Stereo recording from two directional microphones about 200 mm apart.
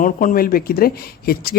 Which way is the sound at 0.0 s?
40° left (ahead or behind).